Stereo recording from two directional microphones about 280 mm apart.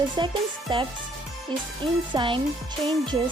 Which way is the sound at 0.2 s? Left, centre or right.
Centre.